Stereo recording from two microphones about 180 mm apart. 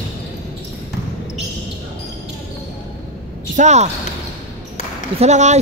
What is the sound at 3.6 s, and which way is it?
Speech, 40° right (ahead or behind).